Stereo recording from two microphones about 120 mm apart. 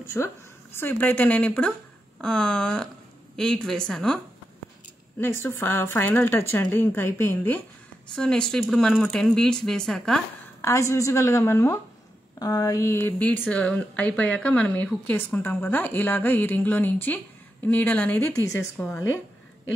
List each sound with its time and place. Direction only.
0.0 s a woman's voice: 20° left (ahead or behind); by 4.2 s 5° left (ahead or behind)
5.2 s speech: 20° left (ahead or behind)
8.1 s speech: 5° left (ahead or behind)
10.6 s speech: 25° left (ahead or behind)